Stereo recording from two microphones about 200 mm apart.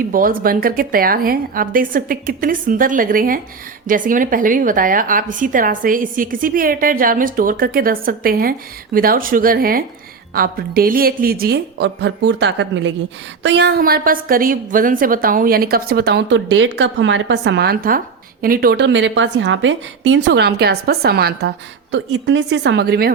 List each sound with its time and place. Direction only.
0.1 s a woman's voice: 45° right (ahead or behind)
21.9 s a woman's voice: 65° right (ahead or behind)